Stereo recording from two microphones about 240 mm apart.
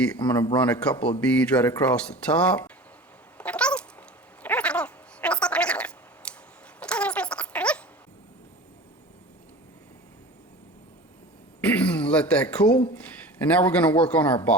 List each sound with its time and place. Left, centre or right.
0.3 s a man's voice: centre
0.5 s speech: centre
3.3 s cat: centre
4.4 s a sound: centre
11.6 s throat clearing: centre
12.9 s speech: centre